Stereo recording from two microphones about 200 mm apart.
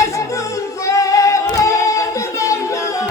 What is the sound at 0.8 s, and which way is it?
Female singing, 15° left (ahead or behind).